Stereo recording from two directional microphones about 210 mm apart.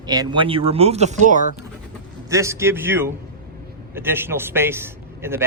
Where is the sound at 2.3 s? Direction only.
15° right (ahead or behind).